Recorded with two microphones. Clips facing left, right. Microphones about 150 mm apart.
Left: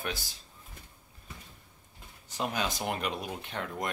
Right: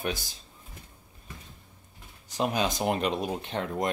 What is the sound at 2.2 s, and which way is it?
Speech, 20° right (ahead or behind).